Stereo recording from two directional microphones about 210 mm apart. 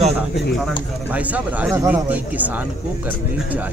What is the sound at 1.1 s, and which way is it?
Speech, 5° right (ahead or behind).